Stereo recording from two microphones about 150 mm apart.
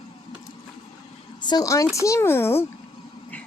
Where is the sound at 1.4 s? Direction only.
25° left (ahead or behind).